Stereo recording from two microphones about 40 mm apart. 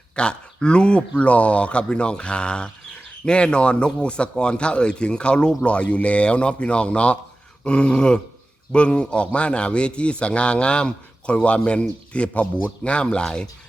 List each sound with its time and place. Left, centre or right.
0.2 s a man's voice: left